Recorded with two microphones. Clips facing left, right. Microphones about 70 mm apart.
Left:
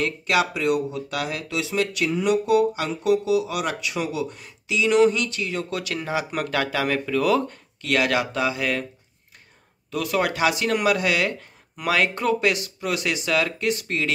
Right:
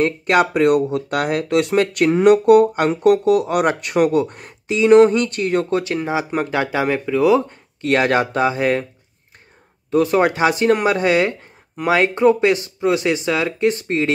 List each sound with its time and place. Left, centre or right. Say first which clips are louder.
0.0 s speech: right 6 dB; right
5.7 s speech: right 7 dB; right
7.8 s speech: right 6 dB; right
9.8 s speech: right 8 dB; right